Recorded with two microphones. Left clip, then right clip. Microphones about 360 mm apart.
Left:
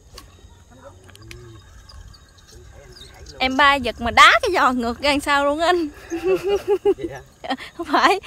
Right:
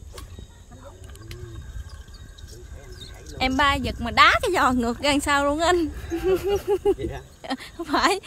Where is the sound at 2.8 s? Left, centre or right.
Centre.